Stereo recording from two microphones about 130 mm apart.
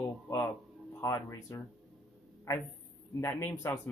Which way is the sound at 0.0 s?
20° left (ahead or behind).